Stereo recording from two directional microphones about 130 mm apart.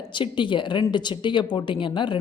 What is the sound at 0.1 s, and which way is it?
Speech, 40° left (ahead or behind).